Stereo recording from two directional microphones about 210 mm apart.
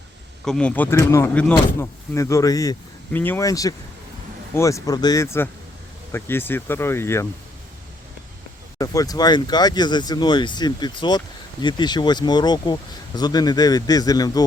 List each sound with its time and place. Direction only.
0.4 s speech: 5° left (ahead or behind)
8.8 s speech: 15° left (ahead or behind)